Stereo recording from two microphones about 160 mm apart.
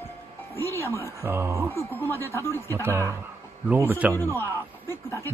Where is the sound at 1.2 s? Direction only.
15° right (ahead or behind).